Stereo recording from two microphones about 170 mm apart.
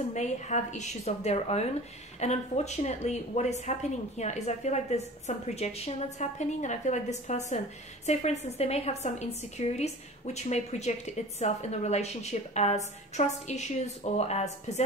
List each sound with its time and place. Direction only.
0.1 s a woman's voice: 45° left (ahead or behind)